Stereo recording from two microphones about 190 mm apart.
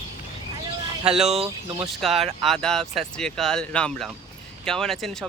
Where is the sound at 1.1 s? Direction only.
Centre (ahead or behind).